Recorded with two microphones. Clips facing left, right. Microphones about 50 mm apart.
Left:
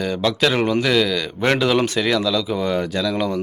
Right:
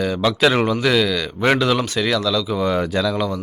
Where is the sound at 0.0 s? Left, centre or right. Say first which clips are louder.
Right 2 dB; centre.